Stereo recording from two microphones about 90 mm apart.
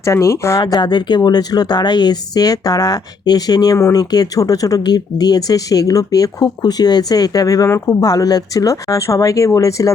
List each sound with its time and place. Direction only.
0.0 s speech: 35° left (ahead or behind)
0.6 s speech: 55° left (ahead or behind); by 9.9 s 35° left (ahead or behind)